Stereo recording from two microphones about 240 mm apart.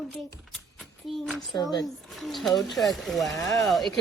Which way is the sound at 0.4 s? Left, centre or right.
Centre.